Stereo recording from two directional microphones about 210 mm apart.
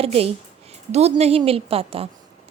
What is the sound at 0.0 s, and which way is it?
A woman's voice, 30° right (ahead or behind).